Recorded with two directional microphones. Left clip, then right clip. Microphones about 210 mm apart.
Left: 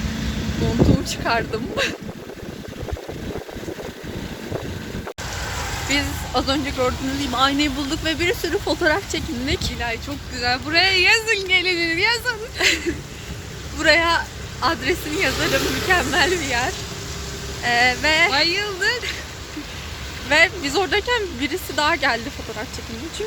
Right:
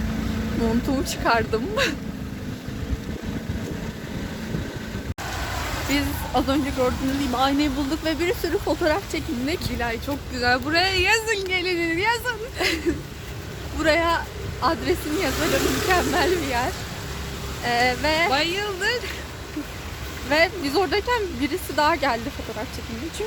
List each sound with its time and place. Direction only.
1.0 s speech: 25° right (ahead or behind)
5.9 s speech: 5° right (ahead or behind)
9.7 s speech: 45° right (ahead or behind); by 12.4 s 20° right (ahead or behind)
12.5 s speech: 5° left (ahead or behind)
15.4 s speech: 55° right (ahead or behind)
15.9 s speech: 5° left (ahead or behind)
18.3 s speech: 30° right (ahead or behind)
20.3 s speech: centre (ahead or behind)